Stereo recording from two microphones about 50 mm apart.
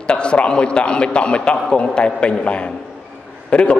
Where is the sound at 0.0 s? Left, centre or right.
Left.